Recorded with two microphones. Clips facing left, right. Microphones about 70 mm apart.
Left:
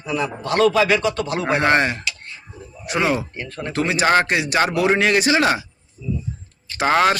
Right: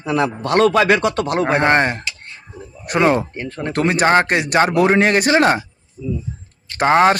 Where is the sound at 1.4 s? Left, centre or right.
Right.